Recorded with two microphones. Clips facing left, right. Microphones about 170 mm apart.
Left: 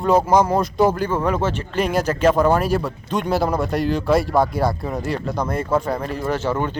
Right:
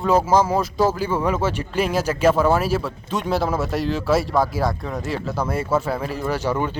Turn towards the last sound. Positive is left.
turn(degrees=-10)  # may be behind; listen again after turning